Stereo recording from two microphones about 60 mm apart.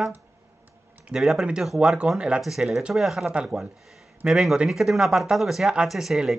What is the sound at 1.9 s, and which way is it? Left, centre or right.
Speech, centre.